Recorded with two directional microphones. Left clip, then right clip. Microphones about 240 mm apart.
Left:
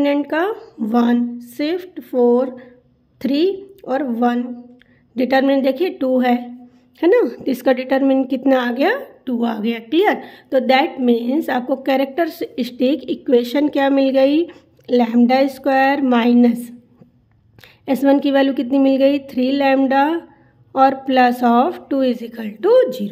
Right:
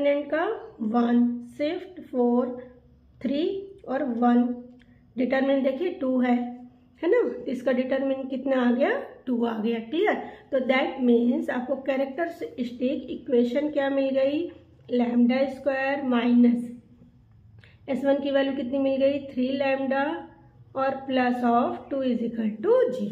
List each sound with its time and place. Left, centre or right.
0.0 s a woman's voice: left
17.8 s a woman's voice: left